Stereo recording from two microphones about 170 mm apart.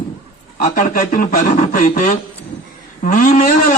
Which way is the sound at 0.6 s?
50° left (ahead or behind).